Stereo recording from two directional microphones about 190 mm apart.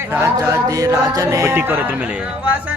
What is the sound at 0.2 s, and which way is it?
Speech, 15° right (ahead or behind).